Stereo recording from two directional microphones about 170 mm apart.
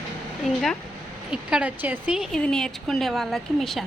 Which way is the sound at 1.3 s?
5° right (ahead or behind).